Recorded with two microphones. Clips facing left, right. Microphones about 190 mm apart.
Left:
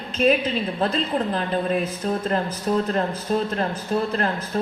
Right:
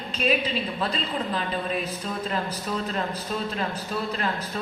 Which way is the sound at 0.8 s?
50° left (ahead or behind).